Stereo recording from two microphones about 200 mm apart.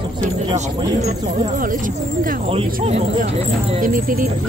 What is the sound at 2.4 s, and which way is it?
Speech, 30° right (ahead or behind).